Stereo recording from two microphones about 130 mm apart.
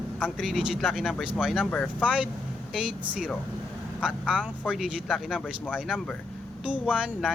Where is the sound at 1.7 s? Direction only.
10° left (ahead or behind).